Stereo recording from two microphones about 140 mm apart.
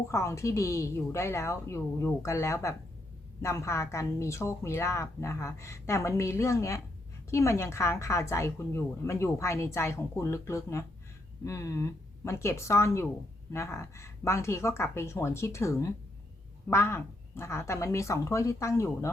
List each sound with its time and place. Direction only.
0.1 s a woman's voice: 20° left (ahead or behind)